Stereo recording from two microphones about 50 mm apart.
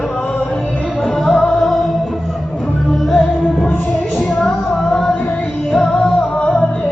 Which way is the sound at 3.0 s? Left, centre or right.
Centre.